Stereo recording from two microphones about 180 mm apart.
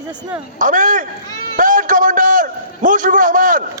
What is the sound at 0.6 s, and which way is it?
Speech, 45° right (ahead or behind).